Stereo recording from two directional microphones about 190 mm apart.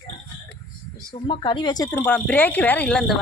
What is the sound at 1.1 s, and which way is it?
Speech, 25° left (ahead or behind).